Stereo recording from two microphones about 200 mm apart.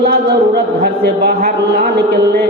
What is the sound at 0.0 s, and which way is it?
A man's voice, 55° right (ahead or behind).